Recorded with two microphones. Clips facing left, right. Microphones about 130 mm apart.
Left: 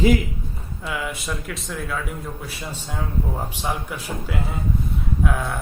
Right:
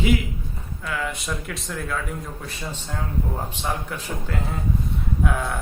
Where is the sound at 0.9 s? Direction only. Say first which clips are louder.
Even; 10° left (ahead or behind).